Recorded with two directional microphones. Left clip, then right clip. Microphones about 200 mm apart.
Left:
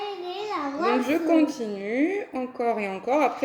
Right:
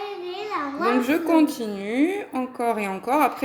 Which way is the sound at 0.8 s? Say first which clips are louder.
Right 1 dB; 55° right (ahead or behind).